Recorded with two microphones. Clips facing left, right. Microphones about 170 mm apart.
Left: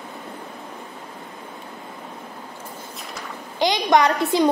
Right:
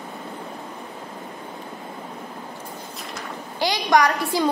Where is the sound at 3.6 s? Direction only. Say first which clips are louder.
Left 2 dB; 20° left (ahead or behind).